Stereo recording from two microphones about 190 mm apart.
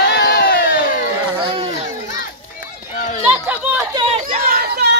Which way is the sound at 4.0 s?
30° right (ahead or behind).